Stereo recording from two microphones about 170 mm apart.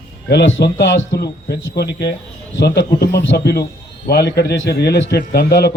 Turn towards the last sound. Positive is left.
turn(degrees=75)  # may be behind; listen again after turning